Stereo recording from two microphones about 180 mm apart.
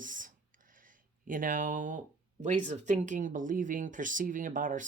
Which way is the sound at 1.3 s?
45° right (ahead or behind).